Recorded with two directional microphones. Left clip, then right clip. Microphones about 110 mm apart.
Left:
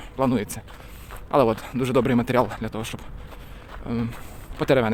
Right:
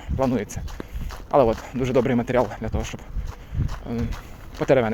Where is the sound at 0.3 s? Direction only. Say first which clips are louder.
Even; 20° left (ahead or behind).